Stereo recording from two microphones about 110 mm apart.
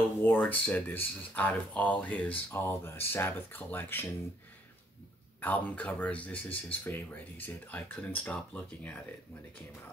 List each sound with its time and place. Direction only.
0.2 s speech: 15° left (ahead or behind)
5.4 s speech: 15° left (ahead or behind)